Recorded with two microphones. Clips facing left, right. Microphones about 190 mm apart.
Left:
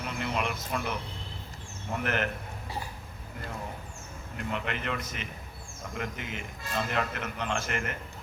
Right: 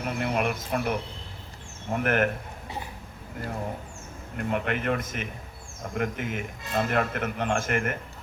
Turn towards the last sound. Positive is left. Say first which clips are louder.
# right 6 dB
turn(degrees=-50)  # may be behind; listen again after turning